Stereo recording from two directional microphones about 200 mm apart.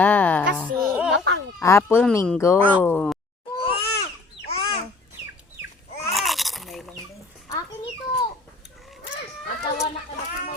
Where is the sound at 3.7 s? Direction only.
25° left (ahead or behind).